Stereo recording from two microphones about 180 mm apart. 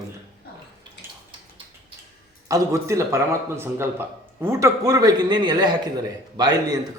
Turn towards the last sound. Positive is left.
turn(degrees=-20)  # may be behind; listen again after turning